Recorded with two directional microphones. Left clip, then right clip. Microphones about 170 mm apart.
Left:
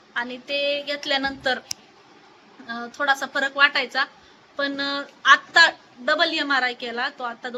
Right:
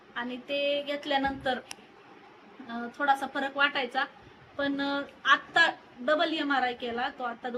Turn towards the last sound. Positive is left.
turn(degrees=15)  # may be behind; listen again after turning